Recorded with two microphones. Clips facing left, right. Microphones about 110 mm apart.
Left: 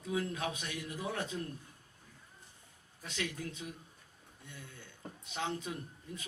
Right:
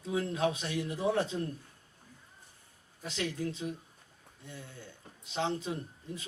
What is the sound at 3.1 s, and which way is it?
Speech, 30° right (ahead or behind).